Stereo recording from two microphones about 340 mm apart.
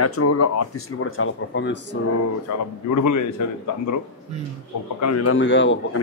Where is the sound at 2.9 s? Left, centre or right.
Left.